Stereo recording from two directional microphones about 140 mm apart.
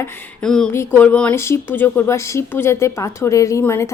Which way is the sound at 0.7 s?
15° left (ahead or behind).